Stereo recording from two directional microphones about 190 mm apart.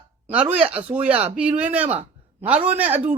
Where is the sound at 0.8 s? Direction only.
30° right (ahead or behind).